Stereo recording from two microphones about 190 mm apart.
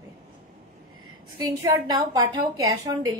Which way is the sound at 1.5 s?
20° right (ahead or behind).